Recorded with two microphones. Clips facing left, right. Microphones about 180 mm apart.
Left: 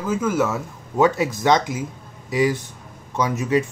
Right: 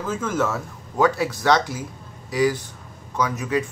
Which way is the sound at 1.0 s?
20° left (ahead or behind).